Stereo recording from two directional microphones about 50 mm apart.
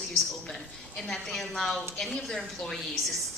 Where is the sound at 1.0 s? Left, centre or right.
Centre.